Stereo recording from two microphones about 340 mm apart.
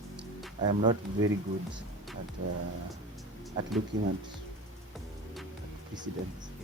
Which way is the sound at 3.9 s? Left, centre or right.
Right.